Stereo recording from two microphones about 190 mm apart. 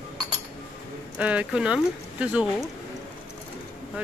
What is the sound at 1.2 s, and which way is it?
Speech, 5° right (ahead or behind).